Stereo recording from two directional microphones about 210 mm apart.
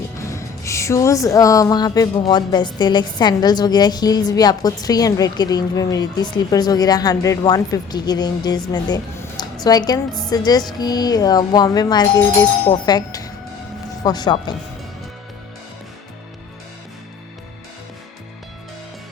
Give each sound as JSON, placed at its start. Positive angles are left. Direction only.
{"t": 0.2, "sound": "speech", "side_deg": 15}